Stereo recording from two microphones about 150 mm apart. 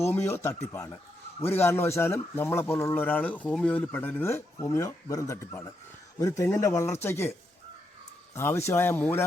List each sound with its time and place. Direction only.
0.0 s speech: 15° left (ahead or behind)
8.4 s speech: 15° left (ahead or behind)